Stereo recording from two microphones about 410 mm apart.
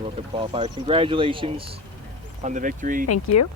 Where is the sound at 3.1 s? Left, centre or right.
Left.